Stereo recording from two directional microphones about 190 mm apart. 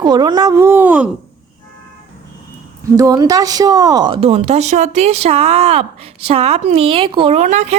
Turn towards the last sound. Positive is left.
turn(degrees=-40)  # may be behind; listen again after turning